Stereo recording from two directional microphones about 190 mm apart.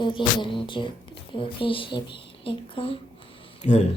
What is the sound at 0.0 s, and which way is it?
Speech, 25° left (ahead or behind).